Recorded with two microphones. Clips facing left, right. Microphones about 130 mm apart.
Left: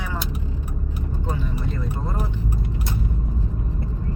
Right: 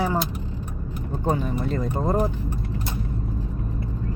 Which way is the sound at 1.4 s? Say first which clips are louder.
Right 4 dB; 45° right (ahead or behind).